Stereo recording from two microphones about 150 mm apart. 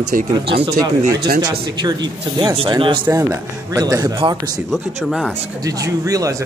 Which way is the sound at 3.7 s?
25° right (ahead or behind).